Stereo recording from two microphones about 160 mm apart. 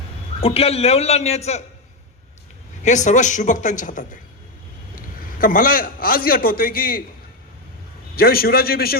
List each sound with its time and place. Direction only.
0.4 s a man's voice: 40° left (ahead or behind)
2.8 s a man's voice: 50° left (ahead or behind); by 7.0 s 65° left (ahead or behind)
8.1 s a man's voice: 70° left (ahead or behind)